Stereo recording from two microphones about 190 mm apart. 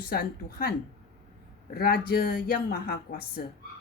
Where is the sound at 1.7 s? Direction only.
55° left (ahead or behind).